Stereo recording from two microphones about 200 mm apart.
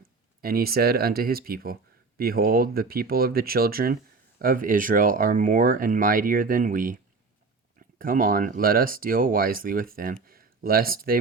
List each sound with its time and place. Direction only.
0.4 s speech: 50° right (ahead or behind)